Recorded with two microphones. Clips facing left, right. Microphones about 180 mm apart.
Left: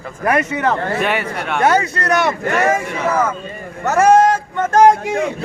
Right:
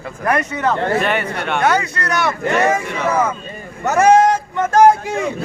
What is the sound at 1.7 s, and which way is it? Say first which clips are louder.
Speech: left 3 dB; 25° left (ahead or behind).